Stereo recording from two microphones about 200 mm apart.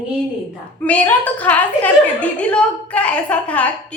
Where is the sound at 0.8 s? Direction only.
5° left (ahead or behind).